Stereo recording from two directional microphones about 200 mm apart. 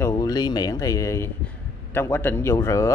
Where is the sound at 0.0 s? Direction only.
20° left (ahead or behind).